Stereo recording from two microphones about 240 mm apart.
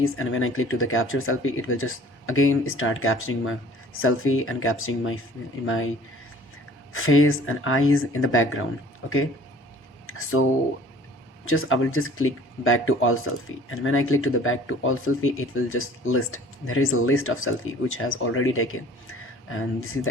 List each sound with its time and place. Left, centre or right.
0.0 s speech: left
6.9 s speech: left
11.4 s speech: left